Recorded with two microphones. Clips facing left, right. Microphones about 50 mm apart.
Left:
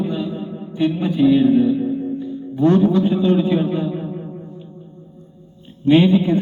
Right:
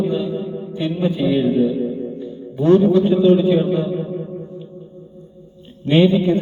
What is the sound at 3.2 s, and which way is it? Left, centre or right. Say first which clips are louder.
Speech: right 3 dB; centre.